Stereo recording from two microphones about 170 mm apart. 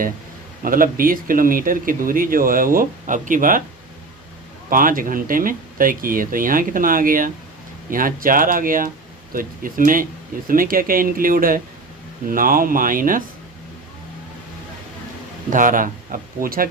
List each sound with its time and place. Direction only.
0.6 s speech: 55° right (ahead or behind)
4.7 s speech: 55° right (ahead or behind)
15.4 s speech: 50° right (ahead or behind)